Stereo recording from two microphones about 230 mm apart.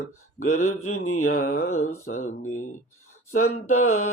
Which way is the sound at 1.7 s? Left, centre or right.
Left.